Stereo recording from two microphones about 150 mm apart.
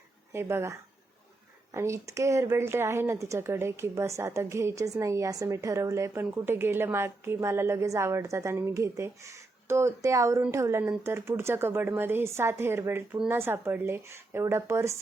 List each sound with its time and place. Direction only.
0.3 s a woman's voice: 15° right (ahead or behind)